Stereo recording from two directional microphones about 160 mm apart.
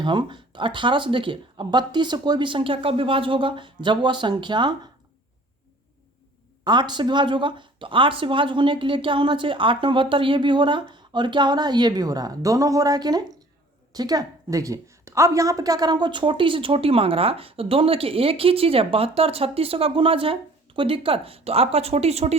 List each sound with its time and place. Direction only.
0.0 s a woman's voice: 30° right (ahead or behind)
6.7 s a woman's voice: 25° right (ahead or behind)